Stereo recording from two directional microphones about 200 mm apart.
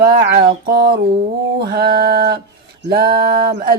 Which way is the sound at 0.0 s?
50° right (ahead or behind).